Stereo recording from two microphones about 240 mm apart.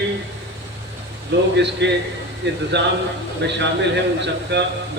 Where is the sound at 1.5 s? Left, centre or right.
Right.